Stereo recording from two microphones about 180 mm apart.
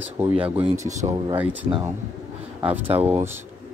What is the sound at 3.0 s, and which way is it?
Speech, 10° right (ahead or behind).